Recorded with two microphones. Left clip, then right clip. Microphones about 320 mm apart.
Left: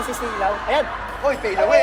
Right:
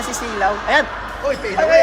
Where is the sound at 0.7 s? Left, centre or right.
Right.